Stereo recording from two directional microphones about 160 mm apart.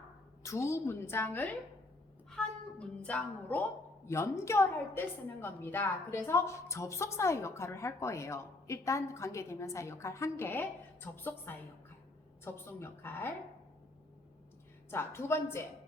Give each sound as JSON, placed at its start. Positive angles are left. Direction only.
{"t": 0.4, "sound": "speech", "side_deg": 20}
{"t": 14.8, "sound": "speech", "side_deg": 15}